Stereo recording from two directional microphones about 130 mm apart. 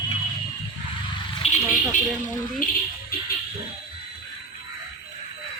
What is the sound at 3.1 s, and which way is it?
Music, 90° left.